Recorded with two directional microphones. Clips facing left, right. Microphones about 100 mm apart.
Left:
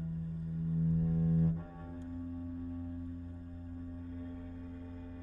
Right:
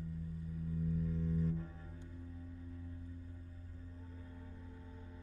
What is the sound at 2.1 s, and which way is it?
Singing bowl, 45° left (ahead or behind).